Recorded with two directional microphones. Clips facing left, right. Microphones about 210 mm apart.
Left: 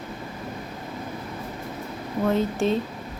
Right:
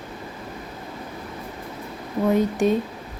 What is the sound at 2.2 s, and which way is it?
Speech, 15° right (ahead or behind).